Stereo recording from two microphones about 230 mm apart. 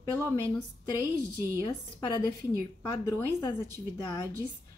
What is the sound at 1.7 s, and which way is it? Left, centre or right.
A woman's voice, centre.